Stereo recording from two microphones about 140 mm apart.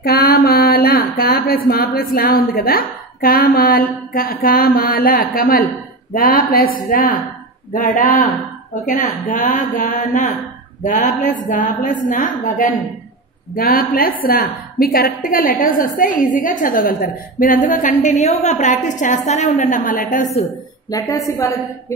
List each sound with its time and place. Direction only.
0.0 s speech: 90° left
7.7 s a man's voice: 80° left
8.8 s a woman's voice: 65° left (ahead or behind)
13.7 s a woman's voice: 90° left; by 20.4 s 60° left (ahead or behind)
20.9 s a woman's voice: 25° left (ahead or behind)